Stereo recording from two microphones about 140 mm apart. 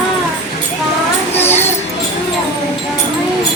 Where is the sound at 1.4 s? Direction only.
15° left (ahead or behind).